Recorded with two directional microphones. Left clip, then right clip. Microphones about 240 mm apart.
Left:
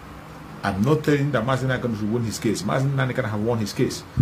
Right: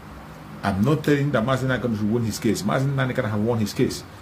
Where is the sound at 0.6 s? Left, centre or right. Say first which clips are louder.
Left 1 dB; centre.